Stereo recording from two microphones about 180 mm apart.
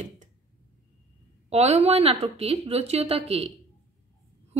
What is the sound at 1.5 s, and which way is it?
A woman's voice, 35° right (ahead or behind).